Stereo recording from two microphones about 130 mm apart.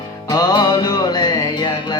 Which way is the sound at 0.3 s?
30° left (ahead or behind).